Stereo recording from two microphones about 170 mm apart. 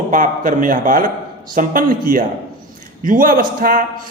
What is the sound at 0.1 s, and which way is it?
A man's voice, 50° right (ahead or behind).